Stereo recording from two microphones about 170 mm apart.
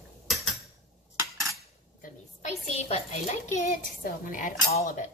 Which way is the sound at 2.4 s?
40° left (ahead or behind).